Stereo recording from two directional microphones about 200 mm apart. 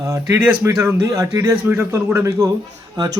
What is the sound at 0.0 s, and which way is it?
Speech, 15° right (ahead or behind).